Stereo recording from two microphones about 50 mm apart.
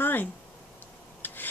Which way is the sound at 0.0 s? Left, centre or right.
Left.